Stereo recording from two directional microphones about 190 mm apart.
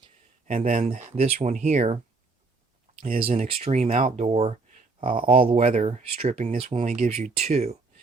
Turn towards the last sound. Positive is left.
turn(degrees=-35)  # may be behind; listen again after turning